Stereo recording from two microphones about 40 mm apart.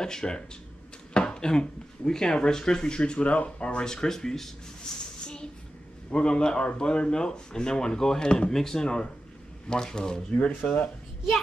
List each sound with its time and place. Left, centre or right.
0.0 s speech: centre
3.0 s speech: left
3.8 s speech: centre
6.0 s speech: left
10.7 s speech: left